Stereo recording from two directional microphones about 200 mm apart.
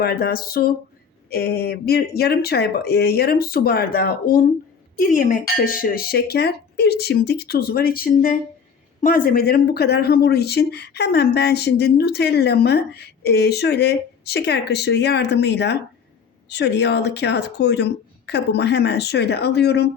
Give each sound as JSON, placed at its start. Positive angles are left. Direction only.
{"t": 0.0, "sound": "speech", "side_deg": 50}